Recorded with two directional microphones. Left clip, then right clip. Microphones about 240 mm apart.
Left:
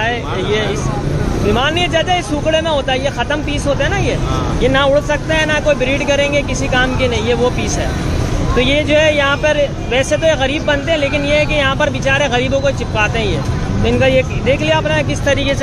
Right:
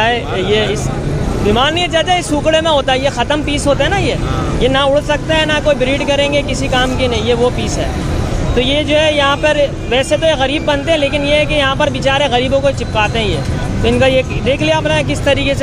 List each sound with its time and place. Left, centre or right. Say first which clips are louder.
0.0 s a sound: right 4 dB; centre
1.5 s speech: right 2 dB; centre
8.5 s speech: even; centre